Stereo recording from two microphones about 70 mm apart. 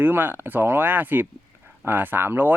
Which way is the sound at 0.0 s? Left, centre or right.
Right.